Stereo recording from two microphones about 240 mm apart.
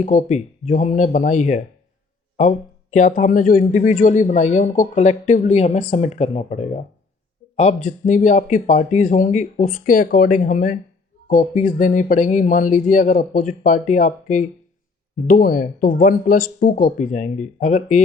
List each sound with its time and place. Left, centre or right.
0.0 s a man's voice: left